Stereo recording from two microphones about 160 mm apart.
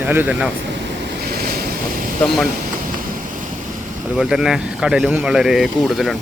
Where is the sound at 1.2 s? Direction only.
70° right (ahead or behind).